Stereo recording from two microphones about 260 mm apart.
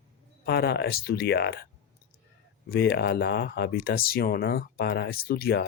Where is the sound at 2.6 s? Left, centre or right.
Left.